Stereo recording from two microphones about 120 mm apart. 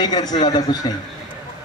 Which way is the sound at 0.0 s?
35° left (ahead or behind).